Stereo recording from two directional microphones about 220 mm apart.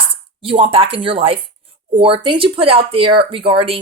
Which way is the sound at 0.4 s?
25° right (ahead or behind).